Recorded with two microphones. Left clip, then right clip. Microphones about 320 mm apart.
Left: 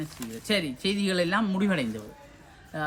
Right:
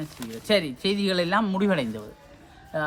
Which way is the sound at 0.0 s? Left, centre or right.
Centre.